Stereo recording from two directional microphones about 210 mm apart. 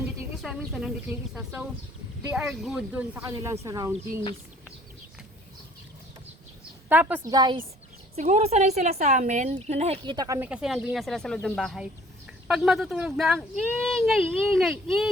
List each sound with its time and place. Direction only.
0.4 s speech: centre (ahead or behind)
6.8 s speech: 10° right (ahead or behind)
7.3 s speech: 20° right (ahead or behind)
8.1 s speech: 35° right (ahead or behind); by 10.5 s 15° right (ahead or behind)
10.5 s speech: 5° right (ahead or behind)